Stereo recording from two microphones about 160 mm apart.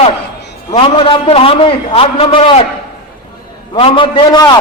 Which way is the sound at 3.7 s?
35° left (ahead or behind).